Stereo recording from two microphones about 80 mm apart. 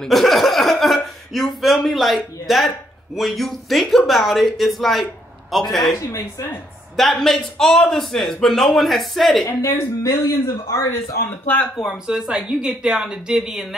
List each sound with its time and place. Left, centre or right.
0.0 s a man's voice: centre
7.0 s a man's voice: centre
9.5 s speech: left
11.2 s speech: left
12.1 s speech: centre